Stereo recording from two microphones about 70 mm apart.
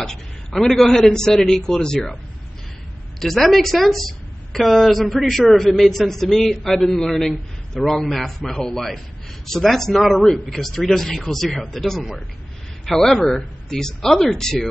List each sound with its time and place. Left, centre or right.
0.0 s a woman's voice: centre
3.2 s a woman's voice: centre